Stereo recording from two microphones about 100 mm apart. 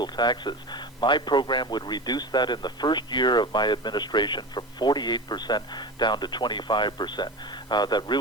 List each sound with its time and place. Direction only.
0.0 s a man's voice: 45° left (ahead or behind)